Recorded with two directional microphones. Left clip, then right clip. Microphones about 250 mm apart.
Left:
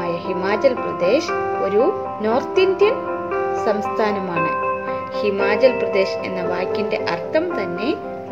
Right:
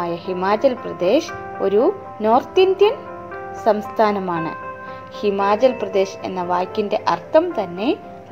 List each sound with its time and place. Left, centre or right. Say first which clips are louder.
0.0 s speech: even; centre